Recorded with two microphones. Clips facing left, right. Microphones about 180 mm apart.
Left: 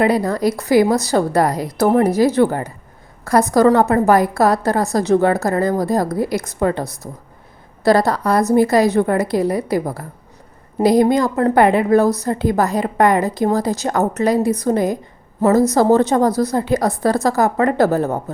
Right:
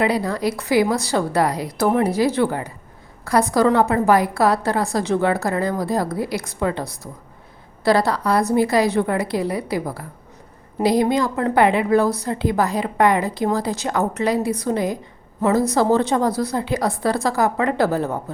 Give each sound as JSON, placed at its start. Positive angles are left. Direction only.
{"t": 0.0, "sound": "a woman's voice", "side_deg": 45}